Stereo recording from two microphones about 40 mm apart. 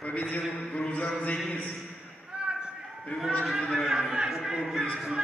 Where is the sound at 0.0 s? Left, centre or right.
Left.